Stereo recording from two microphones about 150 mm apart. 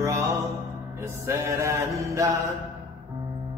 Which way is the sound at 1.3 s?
20° right (ahead or behind).